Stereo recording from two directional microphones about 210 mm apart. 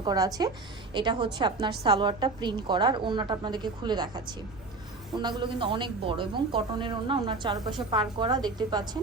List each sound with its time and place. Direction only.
0.0 s a woman's voice: 20° right (ahead or behind)